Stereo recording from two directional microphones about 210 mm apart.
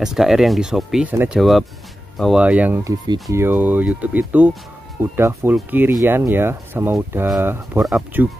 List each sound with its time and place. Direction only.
0.0 s speech: centre (ahead or behind)
1.4 s speech: centre (ahead or behind)